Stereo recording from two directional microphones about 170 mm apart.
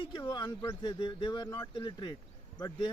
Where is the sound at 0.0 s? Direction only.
30° left (ahead or behind).